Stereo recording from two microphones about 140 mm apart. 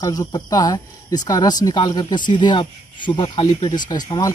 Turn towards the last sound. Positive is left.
turn(degrees=30)  # may be behind; listen again after turning